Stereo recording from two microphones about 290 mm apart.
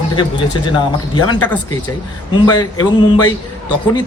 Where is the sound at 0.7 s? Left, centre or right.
Centre.